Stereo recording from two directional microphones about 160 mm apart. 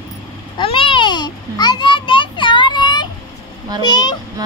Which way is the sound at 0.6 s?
35° left (ahead or behind).